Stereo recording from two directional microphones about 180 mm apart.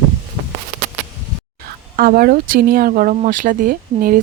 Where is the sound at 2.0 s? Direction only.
55° right (ahead or behind).